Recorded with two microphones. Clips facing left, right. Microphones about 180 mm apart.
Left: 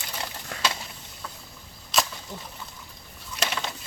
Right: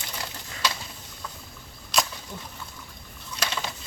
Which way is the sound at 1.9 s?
Centre (ahead or behind).